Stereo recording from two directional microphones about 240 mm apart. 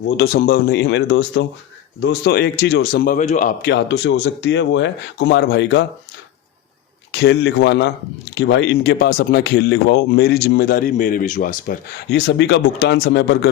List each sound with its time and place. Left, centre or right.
0.2 s speech: left
7.1 s speech: left